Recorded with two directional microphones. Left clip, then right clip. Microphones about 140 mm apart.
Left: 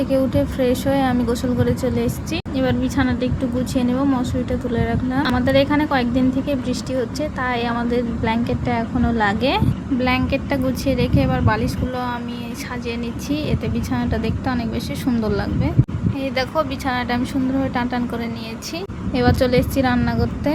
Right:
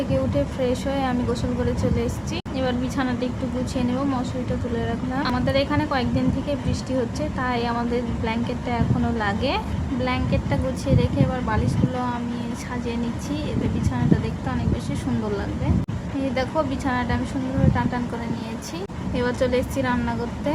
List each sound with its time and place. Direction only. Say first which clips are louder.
0.1 s a woman's voice: left 5 dB; 35° left (ahead or behind)
16.2 s a woman's voice: left 3 dB; 35° left (ahead or behind)
19.1 s a woman's voice: left 5 dB; 30° left (ahead or behind)